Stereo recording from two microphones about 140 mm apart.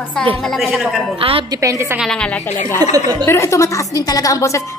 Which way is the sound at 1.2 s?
40° right (ahead or behind).